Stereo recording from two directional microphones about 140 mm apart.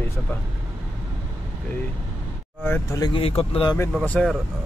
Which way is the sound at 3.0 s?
40° left (ahead or behind).